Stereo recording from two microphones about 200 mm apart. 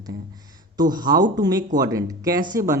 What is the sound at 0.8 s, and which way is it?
A woman's voice, 20° right (ahead or behind).